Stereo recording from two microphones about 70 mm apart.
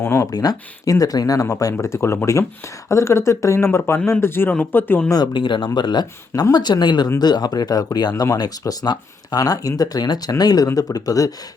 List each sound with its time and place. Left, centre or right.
0.0 s speech: left
0.3 s speech: left
1.8 s speech: left
5.0 s speech: left